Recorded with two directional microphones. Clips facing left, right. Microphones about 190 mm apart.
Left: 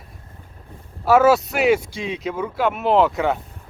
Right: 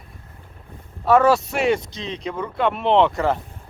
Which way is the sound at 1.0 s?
5° left (ahead or behind).